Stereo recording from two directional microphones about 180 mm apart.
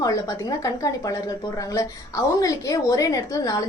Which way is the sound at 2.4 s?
20° left (ahead or behind).